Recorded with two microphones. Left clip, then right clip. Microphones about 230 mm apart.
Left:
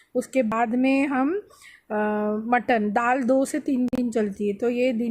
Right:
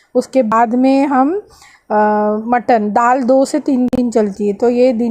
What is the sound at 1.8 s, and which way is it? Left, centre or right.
A woman's voice, centre.